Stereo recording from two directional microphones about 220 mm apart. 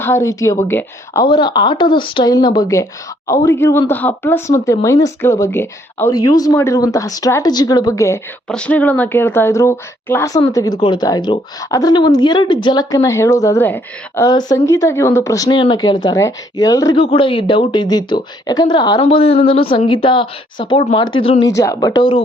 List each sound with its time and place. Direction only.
0.0 s speech: 10° left (ahead or behind)